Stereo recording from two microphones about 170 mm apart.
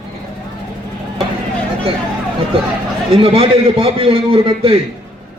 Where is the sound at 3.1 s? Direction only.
30° right (ahead or behind).